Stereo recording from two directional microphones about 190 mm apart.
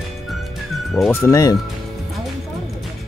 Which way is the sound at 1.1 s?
15° left (ahead or behind).